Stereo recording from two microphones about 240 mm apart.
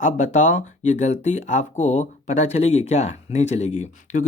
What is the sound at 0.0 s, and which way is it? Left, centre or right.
Speech, left.